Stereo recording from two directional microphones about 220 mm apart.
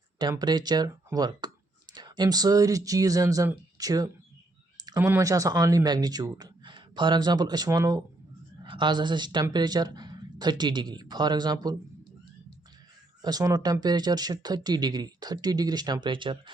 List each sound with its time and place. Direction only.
0.2 s speech: 20° right (ahead or behind)
13.2 s speech: 15° right (ahead or behind)